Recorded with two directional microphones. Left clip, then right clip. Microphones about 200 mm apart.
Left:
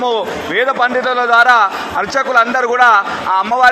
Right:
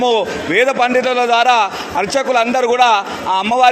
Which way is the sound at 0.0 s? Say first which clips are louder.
Right 1 dB; 50° right (ahead or behind).